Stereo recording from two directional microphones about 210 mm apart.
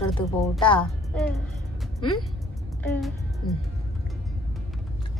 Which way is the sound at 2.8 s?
Centre (ahead or behind).